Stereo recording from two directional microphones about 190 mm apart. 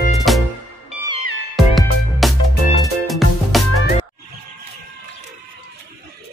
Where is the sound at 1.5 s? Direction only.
Centre (ahead or behind).